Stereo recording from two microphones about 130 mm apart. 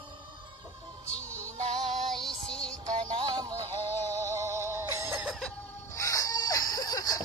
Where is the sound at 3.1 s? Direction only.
30° right (ahead or behind).